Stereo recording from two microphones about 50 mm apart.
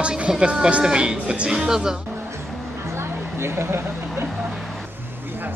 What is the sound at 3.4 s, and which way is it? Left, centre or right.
Speech, right.